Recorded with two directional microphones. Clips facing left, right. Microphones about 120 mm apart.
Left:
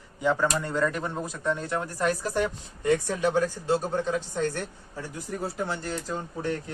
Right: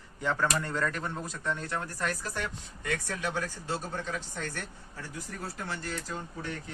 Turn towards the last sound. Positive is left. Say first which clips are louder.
# left 6 dB
turn(degrees=20)  # may be behind; listen again after turning